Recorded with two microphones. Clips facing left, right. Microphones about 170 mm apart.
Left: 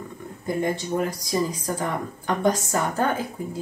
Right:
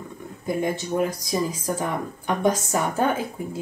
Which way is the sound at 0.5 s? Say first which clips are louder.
Even; 10° right (ahead or behind).